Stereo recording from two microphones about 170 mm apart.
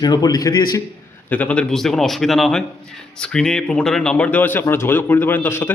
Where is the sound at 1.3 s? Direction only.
10° left (ahead or behind).